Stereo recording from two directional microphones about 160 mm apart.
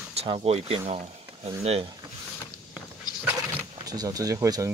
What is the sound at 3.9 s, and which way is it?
Speech, 20° right (ahead or behind).